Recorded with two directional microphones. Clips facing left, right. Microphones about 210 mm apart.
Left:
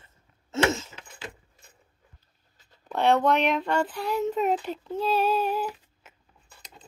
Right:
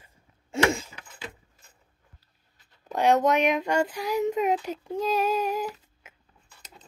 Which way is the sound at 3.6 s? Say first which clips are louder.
Right 1 dB; 10° right (ahead or behind).